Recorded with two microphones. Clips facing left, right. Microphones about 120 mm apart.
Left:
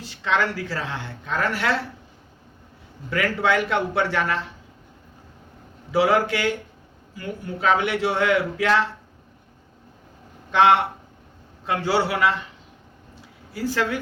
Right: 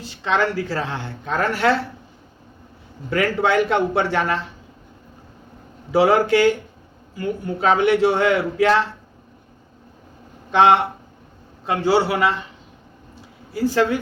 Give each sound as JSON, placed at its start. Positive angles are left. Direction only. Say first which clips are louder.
{"t": 0.0, "sound": "a woman's voice", "louder": "right 3 dB", "side_deg": -20}
{"t": 3.1, "sound": "a man's voice", "louder": "right 3 dB", "side_deg": -30}
{"t": 5.9, "sound": "a man's voice", "louder": "right 4 dB", "side_deg": -30}
{"t": 10.5, "sound": "a man's voice", "louder": "right 2 dB", "side_deg": -25}
{"t": 13.7, "sound": "a man's voice", "louder": "right 5 dB", "side_deg": -30}